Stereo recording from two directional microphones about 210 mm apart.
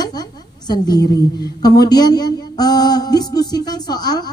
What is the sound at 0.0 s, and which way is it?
A woman's voice, 20° left (ahead or behind).